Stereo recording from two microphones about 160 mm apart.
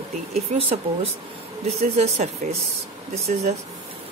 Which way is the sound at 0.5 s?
40° right (ahead or behind).